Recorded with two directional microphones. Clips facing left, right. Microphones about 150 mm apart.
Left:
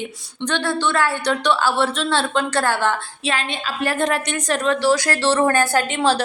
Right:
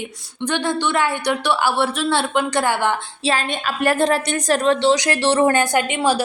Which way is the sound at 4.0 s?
35° right (ahead or behind).